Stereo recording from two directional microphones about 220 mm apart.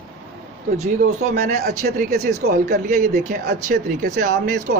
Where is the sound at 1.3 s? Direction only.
45° right (ahead or behind).